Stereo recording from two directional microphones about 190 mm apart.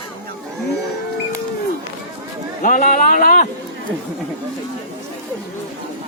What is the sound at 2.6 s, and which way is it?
Speech, 45° left (ahead or behind).